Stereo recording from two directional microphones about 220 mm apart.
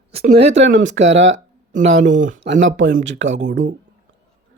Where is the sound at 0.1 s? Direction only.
30° right (ahead or behind).